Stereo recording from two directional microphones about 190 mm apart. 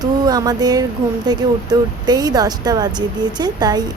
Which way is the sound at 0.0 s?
20° right (ahead or behind).